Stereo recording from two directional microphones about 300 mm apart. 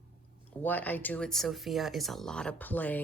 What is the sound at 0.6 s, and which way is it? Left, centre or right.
Speech, centre.